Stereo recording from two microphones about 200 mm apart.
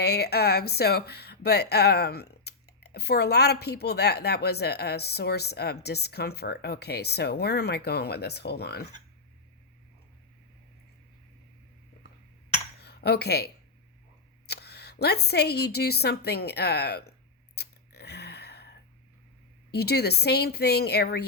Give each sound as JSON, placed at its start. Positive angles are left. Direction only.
{"t": 0.0, "sound": "speech", "side_deg": 55}
{"t": 12.8, "sound": "speech", "side_deg": 55}
{"t": 17.6, "sound": "a sound", "side_deg": 55}
{"t": 19.7, "sound": "speech", "side_deg": 55}